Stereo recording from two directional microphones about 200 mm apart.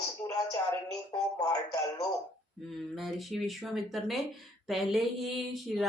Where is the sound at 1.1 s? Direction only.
20° left (ahead or behind).